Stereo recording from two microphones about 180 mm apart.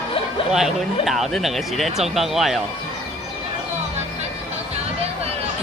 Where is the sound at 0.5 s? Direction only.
Centre (ahead or behind).